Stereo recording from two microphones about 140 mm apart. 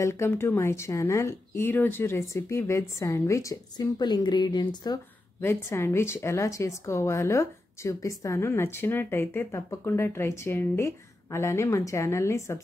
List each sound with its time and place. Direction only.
0.0 s a woman's voice: 20° left (ahead or behind)
5.4 s a woman's voice: 15° left (ahead or behind)